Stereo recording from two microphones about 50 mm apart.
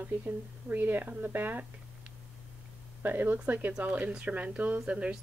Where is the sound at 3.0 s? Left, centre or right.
Right.